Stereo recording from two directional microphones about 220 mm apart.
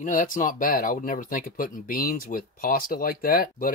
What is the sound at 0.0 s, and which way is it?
Speech, 35° left (ahead or behind).